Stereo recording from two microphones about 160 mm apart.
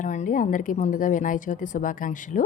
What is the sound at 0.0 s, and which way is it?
A woman's voice, 50° left (ahead or behind).